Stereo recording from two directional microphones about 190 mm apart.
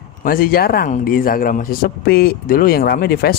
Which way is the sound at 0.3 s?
50° left (ahead or behind).